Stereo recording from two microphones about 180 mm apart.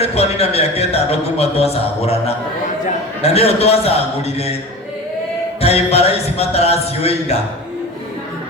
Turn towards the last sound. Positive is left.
turn(degrees=35)  # may be behind; listen again after turning